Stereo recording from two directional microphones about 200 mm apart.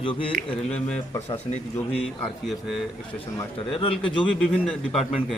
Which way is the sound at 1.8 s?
25° left (ahead or behind).